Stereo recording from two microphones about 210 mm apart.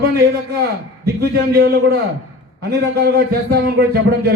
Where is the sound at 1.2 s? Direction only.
45° right (ahead or behind).